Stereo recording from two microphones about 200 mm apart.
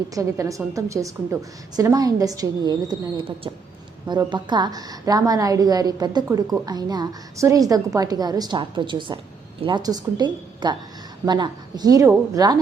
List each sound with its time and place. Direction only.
0.1 s a woman's voice: 15° right (ahead or behind)